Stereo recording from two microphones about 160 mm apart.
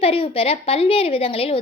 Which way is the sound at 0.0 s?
35° left (ahead or behind).